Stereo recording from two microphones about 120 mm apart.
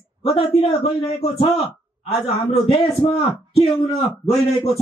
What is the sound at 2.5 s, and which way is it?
Speech, 50° left (ahead or behind).